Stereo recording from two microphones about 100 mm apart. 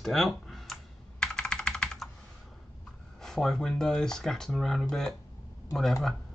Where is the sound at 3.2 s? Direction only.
5° left (ahead or behind).